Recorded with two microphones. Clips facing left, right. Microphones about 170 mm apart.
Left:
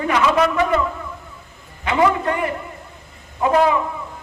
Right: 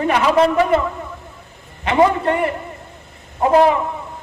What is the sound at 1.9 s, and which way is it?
A woman's voice, 25° right (ahead or behind).